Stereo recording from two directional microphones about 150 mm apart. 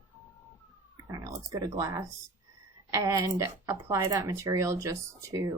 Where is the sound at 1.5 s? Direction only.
20° right (ahead or behind).